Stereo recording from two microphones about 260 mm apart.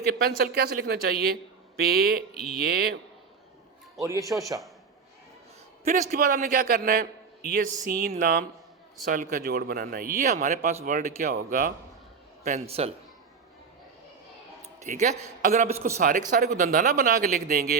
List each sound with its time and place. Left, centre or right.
0.0 s speech: right
4.0 s speech: centre
4.3 s a man's voice: centre
5.8 s a man's voice: right
14.8 s a man's voice: right